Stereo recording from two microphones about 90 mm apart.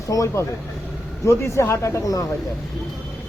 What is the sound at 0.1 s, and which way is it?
Speech, 35° left (ahead or behind).